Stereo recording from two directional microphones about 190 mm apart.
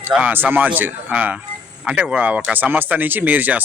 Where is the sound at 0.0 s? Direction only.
10° right (ahead or behind).